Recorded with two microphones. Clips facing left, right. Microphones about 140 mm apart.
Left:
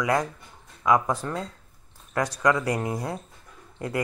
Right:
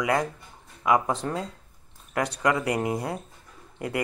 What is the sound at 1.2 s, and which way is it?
Speech, 15° right (ahead or behind).